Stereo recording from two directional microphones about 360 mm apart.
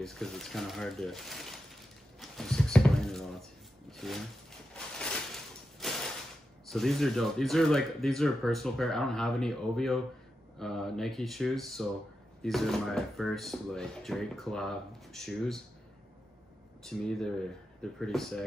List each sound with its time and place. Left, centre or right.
0.0 s speech: centre
2.1 s a sound: centre
6.7 s speech: centre
16.8 s speech: centre